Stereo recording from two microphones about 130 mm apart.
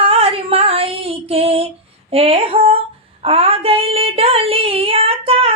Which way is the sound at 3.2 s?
50° right (ahead or behind).